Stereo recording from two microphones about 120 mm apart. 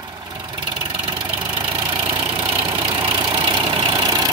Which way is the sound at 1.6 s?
40° right (ahead or behind).